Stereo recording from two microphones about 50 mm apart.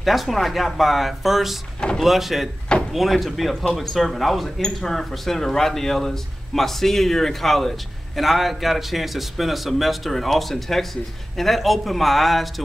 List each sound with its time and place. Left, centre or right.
0.0 s speech: centre